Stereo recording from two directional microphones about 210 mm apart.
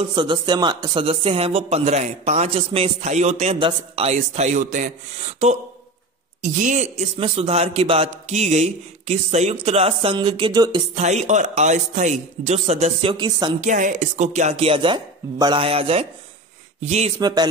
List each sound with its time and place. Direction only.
0.0 s a man's voice: 25° right (ahead or behind)
11.0 s a man's voice: 35° right (ahead or behind)
13.6 s a man's voice: 35° right (ahead or behind)
17.2 s speech: 20° right (ahead or behind)